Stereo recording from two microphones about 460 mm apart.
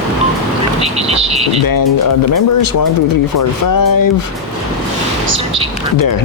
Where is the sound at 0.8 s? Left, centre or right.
Centre.